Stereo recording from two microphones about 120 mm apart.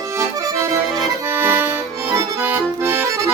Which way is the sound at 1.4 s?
20° right (ahead or behind).